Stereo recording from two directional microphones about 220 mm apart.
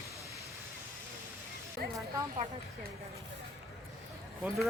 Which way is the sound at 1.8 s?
45° right (ahead or behind).